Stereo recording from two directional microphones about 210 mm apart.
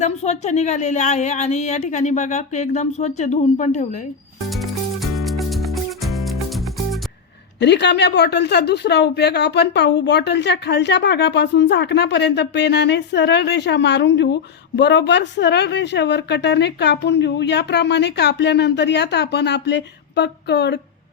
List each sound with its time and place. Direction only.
0.0 s a woman's voice: 30° left (ahead or behind)
4.4 s music: centre (ahead or behind)
7.6 s a woman's voice: 55° left (ahead or behind)